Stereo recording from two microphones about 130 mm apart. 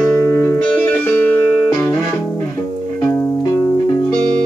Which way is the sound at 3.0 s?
25° left (ahead or behind).